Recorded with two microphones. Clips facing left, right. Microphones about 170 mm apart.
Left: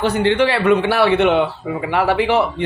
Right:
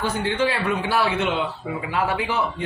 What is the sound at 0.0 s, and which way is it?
Speech, 75° left (ahead or behind).